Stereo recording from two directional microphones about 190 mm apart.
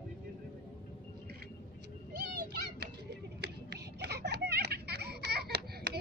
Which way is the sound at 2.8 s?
60° right (ahead or behind).